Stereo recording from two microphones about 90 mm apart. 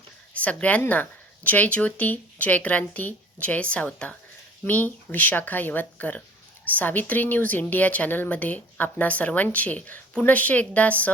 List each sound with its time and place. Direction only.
0.4 s speech: 15° left (ahead or behind)